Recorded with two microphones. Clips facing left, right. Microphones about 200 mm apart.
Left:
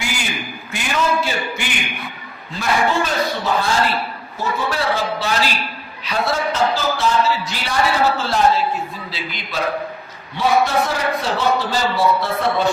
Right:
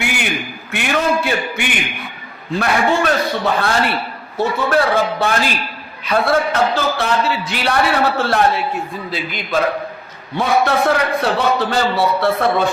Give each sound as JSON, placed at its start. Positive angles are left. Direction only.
{"t": 0.0, "sound": "a sound", "side_deg": -60}
{"t": 2.6, "sound": "a man's voice", "side_deg": -60}
{"t": 9.0, "sound": "a man's voice", "side_deg": -50}